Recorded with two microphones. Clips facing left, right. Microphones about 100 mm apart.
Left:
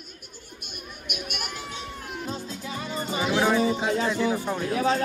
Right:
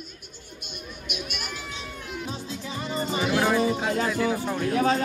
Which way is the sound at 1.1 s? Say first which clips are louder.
Left 1 dB; 55° left (ahead or behind).